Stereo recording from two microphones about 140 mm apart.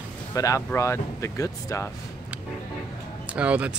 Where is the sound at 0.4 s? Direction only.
25° left (ahead or behind).